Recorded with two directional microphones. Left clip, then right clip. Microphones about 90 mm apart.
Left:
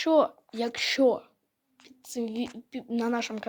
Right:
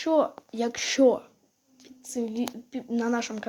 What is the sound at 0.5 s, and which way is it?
Speech, 20° left (ahead or behind).